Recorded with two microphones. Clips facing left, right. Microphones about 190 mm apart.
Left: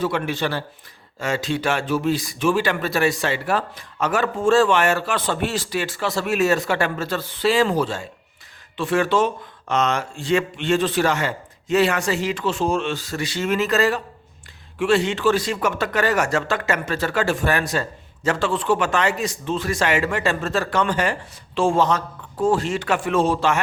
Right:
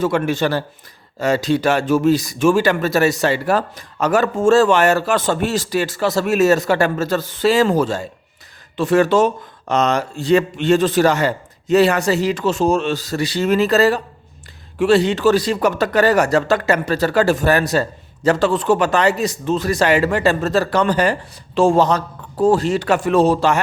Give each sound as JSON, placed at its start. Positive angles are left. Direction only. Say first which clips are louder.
{"t": 0.0, "sound": "speech", "louder": "right 5 dB", "side_deg": -45}